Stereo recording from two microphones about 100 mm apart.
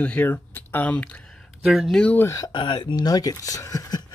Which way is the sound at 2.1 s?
30° left (ahead or behind).